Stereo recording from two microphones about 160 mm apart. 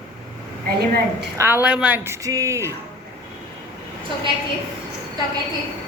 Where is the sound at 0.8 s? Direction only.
90° right.